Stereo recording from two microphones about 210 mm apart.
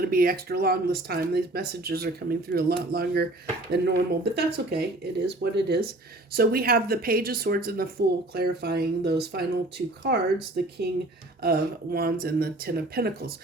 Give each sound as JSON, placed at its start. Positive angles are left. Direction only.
{"t": 0.0, "sound": "speech", "side_deg": -45}